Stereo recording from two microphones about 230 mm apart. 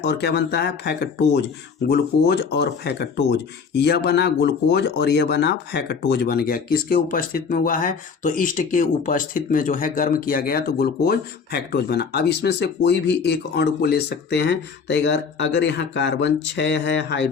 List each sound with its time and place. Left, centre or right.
0.0 s speech: left